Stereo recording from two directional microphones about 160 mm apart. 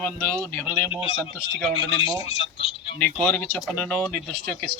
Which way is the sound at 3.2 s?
10° left (ahead or behind).